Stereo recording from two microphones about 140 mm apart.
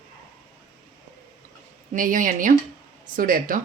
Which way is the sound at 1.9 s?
70° right (ahead or behind).